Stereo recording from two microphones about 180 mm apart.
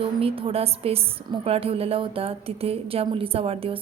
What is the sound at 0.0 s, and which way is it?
A woman's voice, 30° right (ahead or behind).